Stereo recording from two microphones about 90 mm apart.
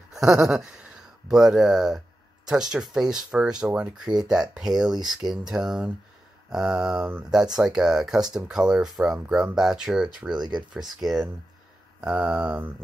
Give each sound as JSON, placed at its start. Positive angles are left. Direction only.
{"t": 0.1, "sound": "a sound", "side_deg": -5}
{"t": 1.3, "sound": "speech", "side_deg": -5}
{"t": 10.3, "sound": "speech", "side_deg": -55}
{"t": 11.0, "sound": "speech", "side_deg": -5}